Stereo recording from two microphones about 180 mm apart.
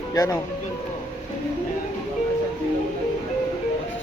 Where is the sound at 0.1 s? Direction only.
20° left (ahead or behind).